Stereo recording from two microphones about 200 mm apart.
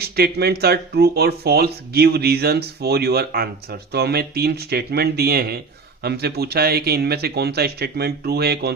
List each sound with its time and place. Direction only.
0.0 s speech: 50° right (ahead or behind)